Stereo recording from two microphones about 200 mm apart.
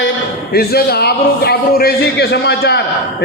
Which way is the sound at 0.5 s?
50° left (ahead or behind).